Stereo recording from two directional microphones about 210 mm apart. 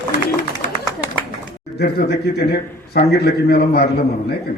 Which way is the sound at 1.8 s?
50° left (ahead or behind).